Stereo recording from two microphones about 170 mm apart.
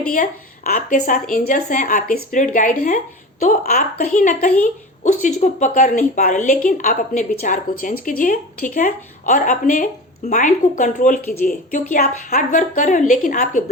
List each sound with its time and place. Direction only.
0.1 s a woman's voice: 55° left (ahead or behind)